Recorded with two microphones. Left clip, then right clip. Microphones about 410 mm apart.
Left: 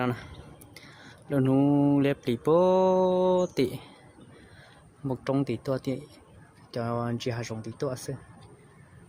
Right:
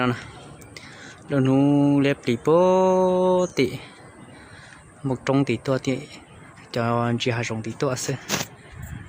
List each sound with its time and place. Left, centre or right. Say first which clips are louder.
0.0 s speech: right 6 dB; left
5.0 s speech: right 6 dB; left